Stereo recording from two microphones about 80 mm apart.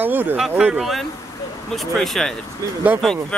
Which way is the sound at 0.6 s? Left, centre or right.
Centre.